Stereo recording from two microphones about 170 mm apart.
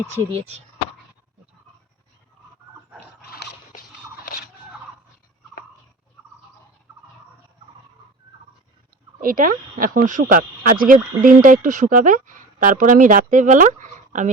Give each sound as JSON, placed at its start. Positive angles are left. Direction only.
{"t": 0.3, "sound": "speech", "side_deg": -35}
{"t": 3.2, "sound": "a sound", "side_deg": 65}
{"t": 9.2, "sound": "speech", "side_deg": -55}